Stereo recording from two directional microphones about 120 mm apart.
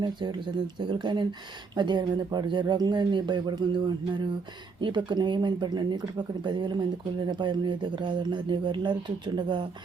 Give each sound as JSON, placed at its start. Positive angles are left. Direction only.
{"t": 0.0, "sound": "speech", "side_deg": -40}